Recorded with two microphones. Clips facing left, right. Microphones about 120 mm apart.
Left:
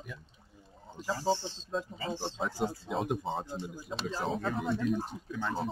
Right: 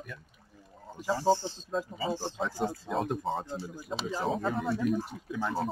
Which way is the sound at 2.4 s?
10° left (ahead or behind).